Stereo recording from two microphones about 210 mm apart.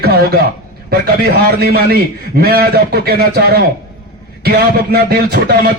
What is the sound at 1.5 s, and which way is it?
A man's voice, 50° right (ahead or behind).